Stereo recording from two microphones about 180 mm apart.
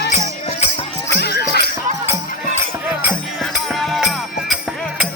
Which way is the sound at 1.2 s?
60° left (ahead or behind).